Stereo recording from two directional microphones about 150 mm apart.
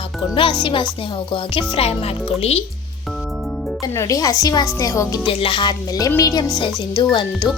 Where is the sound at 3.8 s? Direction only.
20° left (ahead or behind).